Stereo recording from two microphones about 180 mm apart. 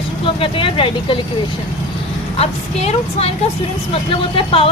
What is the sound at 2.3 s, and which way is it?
A woman's voice, 35° left (ahead or behind).